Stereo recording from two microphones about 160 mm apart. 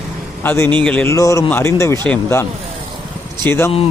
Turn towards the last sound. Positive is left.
turn(degrees=10)  # may be behind; listen again after turning